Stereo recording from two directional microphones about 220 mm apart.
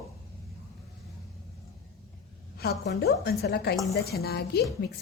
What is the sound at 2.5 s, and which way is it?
A woman's voice, 45° left (ahead or behind).